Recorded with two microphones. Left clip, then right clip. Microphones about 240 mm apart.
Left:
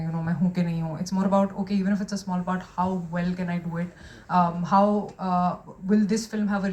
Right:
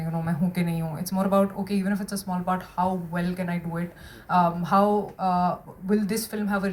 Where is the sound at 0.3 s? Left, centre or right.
Right.